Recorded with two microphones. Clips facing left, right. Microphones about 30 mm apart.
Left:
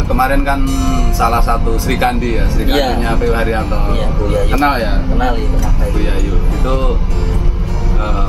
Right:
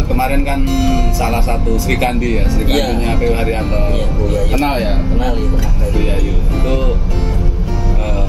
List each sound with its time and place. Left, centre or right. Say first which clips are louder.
0.1 s speech: left 3 dB; centre
0.7 s speech: right 1 dB; centre
1.2 s speech: left 3 dB; centre